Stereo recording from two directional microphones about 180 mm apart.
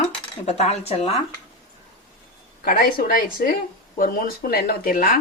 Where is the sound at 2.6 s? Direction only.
55° left (ahead or behind).